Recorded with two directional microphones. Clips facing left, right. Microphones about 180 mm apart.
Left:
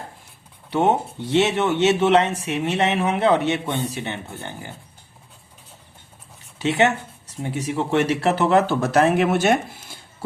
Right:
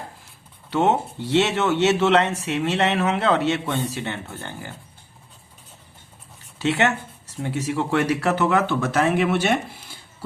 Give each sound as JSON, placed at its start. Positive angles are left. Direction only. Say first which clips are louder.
{"t": 0.7, "sound": "speech", "louder": "left 1 dB", "side_deg": 15}
{"t": 6.6, "sound": "speech", "louder": "left 2 dB", "side_deg": 15}